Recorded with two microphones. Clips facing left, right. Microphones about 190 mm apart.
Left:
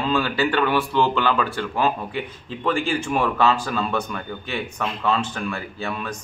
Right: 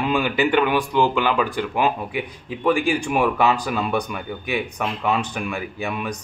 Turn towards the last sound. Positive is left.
turn(degrees=-15)  # may be behind; listen again after turning